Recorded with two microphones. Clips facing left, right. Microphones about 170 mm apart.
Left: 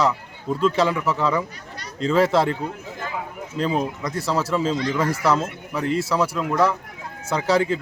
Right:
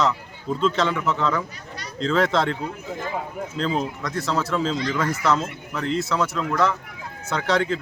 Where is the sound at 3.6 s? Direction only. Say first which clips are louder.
Left 2 dB; 10° left (ahead or behind).